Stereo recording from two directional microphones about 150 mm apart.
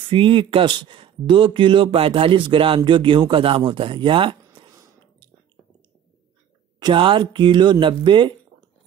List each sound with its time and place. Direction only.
0.1 s speech: 35° right (ahead or behind)
6.8 s speech: 35° right (ahead or behind)